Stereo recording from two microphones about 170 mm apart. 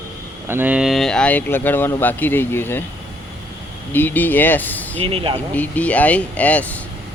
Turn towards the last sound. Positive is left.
turn(degrees=10)  # may be behind; listen again after turning